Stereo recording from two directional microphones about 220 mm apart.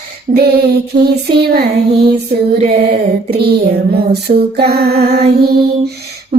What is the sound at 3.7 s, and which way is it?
Child singing, 45° right (ahead or behind).